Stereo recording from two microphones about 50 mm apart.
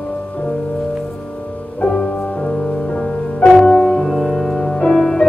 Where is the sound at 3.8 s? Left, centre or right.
Centre.